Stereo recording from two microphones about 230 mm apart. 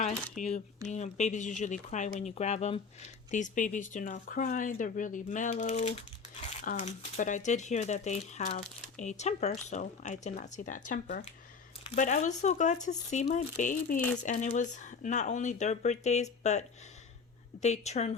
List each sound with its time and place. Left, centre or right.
0.4 s a woman's voice: left